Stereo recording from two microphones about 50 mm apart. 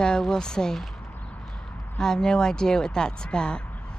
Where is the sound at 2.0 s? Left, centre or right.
Centre.